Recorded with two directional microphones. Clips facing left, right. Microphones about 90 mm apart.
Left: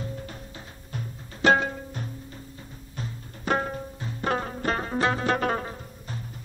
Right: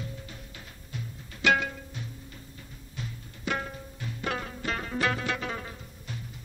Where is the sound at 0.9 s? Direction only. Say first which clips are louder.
Left 3 dB; 35° left (ahead or behind).